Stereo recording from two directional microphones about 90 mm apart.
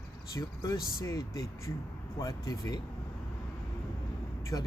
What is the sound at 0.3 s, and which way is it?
Speech, 35° left (ahead or behind).